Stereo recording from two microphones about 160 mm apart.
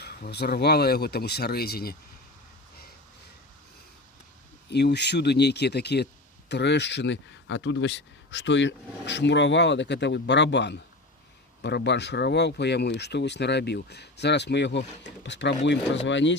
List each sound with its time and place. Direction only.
0.0 s speech: 85° left
4.7 s speech: 90° left